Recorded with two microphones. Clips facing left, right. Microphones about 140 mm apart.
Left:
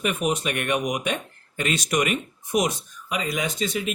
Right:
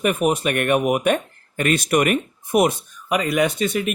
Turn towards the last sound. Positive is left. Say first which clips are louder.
# right 7 dB
turn(degrees=-60)  # may be behind; listen again after turning